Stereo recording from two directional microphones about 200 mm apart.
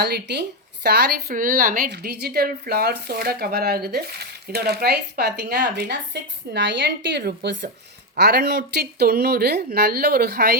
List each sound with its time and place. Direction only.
0.0 s speech: 55° right (ahead or behind)